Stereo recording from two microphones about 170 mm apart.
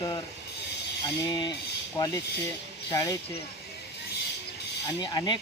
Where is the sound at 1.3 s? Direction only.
25° left (ahead or behind).